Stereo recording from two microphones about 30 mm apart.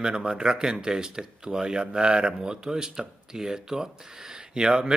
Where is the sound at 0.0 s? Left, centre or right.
Right.